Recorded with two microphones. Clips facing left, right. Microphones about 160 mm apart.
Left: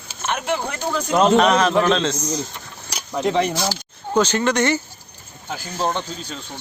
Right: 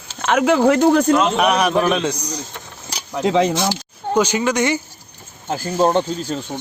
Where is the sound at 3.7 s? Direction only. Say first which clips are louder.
Right 3 dB; 10° right (ahead or behind).